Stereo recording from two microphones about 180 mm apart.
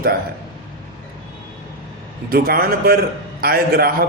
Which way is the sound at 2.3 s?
55° right (ahead or behind).